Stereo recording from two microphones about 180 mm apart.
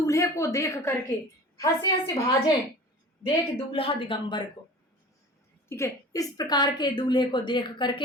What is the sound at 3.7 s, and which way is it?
Speech, 30° left (ahead or behind).